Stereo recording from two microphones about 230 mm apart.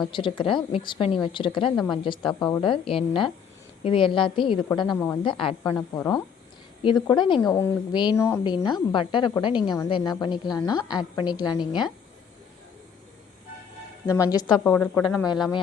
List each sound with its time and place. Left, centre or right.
0.1 s a woman's voice: left
1.7 s speech: centre
2.0 s a woman's voice: left
14.1 s speech: centre